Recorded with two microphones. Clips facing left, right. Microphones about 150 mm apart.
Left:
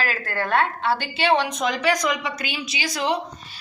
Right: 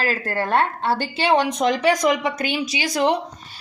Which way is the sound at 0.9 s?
45° right (ahead or behind).